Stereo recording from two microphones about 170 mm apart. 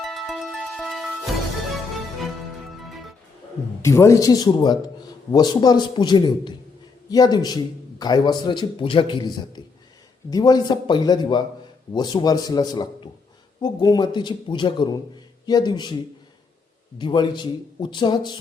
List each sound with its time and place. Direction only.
0.0 s music: centre (ahead or behind)
2.8 s music: centre (ahead or behind)
3.8 s a man's voice: 15° left (ahead or behind)
17.0 s a man's voice: 25° left (ahead or behind)